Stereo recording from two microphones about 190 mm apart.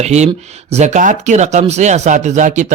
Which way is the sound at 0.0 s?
35° right (ahead or behind).